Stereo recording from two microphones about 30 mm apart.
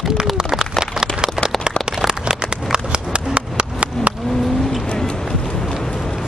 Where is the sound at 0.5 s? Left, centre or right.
Centre.